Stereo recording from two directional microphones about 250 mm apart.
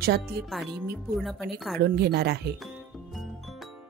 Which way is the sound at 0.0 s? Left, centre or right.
Right.